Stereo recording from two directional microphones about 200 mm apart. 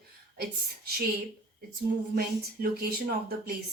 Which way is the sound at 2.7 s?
50° right (ahead or behind).